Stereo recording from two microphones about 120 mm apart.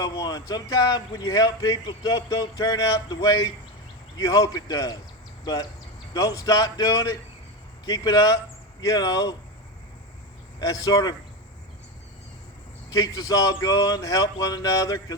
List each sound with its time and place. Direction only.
0.0 s speech: 35° left (ahead or behind)
6.1 s speech: 30° left (ahead or behind)
10.6 s speech: 30° left (ahead or behind)
12.9 s speech: 30° left (ahead or behind)